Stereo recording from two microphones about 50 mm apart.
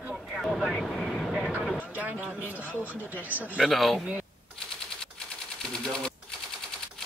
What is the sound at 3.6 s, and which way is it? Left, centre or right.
Speech, centre.